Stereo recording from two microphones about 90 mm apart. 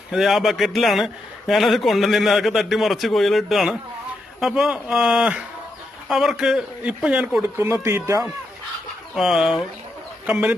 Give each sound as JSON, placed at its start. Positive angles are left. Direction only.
{"t": 0.1, "sound": "a man's voice", "side_deg": 0}
{"t": 7.4, "sound": "speech", "side_deg": -30}
{"t": 9.1, "sound": "a man's voice", "side_deg": -5}